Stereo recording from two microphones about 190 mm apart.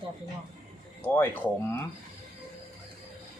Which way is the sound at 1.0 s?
10° left (ahead or behind).